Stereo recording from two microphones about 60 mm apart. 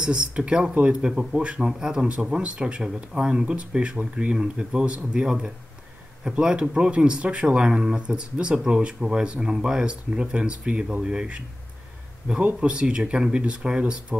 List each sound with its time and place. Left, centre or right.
0.0 s speech: centre
12.5 s speech: centre